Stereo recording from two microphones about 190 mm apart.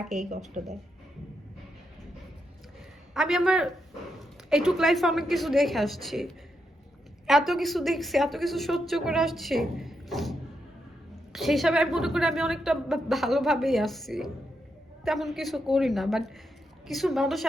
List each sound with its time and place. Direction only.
0.0 s a woman's voice: centre (ahead or behind)
0.6 s speech: 45° right (ahead or behind)
3.2 s a woman's voice: centre (ahead or behind)